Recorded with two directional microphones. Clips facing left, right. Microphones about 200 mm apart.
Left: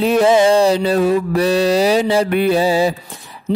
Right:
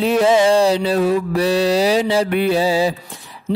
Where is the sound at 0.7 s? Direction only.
50° left (ahead or behind).